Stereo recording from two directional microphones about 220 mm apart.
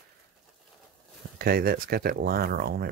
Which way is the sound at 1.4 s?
40° right (ahead or behind).